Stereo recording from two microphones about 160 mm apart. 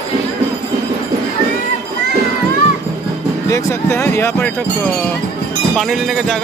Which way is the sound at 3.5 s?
20° left (ahead or behind).